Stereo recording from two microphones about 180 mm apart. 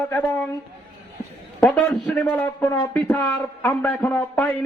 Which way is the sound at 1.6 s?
5° left (ahead or behind).